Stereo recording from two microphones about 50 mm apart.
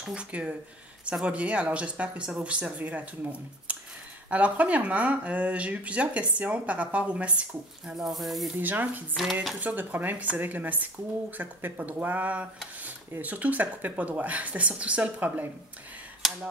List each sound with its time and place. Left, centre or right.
0.0 s speech: right
7.9 s speech: centre
8.5 s speech: right
9.1 s speech: centre
9.6 s speech: right